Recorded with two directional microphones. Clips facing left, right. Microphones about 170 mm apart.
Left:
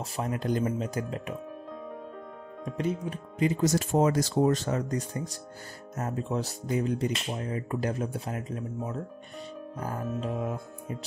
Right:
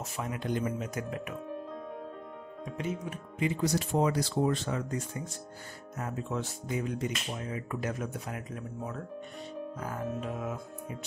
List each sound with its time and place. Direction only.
0.0 s speech: 35° left (ahead or behind)
2.8 s speech: 35° left (ahead or behind)